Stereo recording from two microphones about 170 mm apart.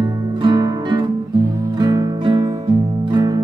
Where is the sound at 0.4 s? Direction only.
25° right (ahead or behind).